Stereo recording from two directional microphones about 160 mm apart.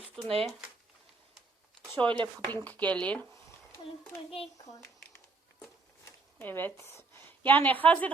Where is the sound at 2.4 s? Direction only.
10° left (ahead or behind).